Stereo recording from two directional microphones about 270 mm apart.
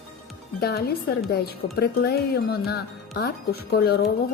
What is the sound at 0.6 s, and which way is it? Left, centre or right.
Speech, left.